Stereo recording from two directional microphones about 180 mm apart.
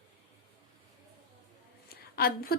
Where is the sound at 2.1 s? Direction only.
55° left (ahead or behind).